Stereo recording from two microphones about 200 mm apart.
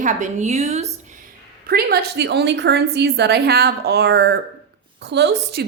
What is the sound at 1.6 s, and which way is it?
A woman's voice, 50° right (ahead or behind).